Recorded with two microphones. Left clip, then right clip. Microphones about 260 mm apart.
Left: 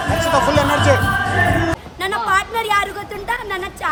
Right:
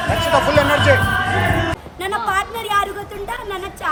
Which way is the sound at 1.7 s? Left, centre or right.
Centre.